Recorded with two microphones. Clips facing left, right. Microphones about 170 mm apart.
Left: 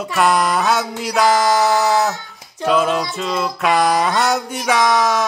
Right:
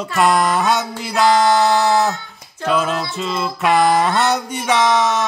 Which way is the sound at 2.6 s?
Centre (ahead or behind).